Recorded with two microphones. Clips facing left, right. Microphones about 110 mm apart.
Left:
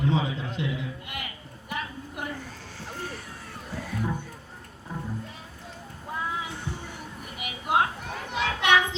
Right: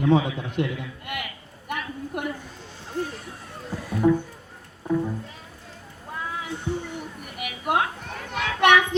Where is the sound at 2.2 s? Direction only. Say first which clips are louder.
Right 5 dB; 60° right (ahead or behind).